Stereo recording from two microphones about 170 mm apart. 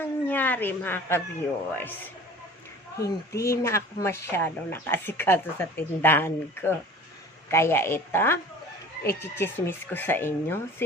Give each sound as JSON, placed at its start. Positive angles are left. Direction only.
{"t": 0.0, "sound": "a sound", "side_deg": 10}
{"t": 1.7, "sound": "speech", "side_deg": 10}
{"t": 3.0, "sound": "speech", "side_deg": 15}